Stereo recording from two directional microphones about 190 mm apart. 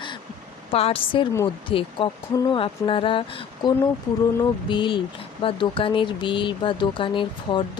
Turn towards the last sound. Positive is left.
turn(degrees=25)  # may be behind; listen again after turning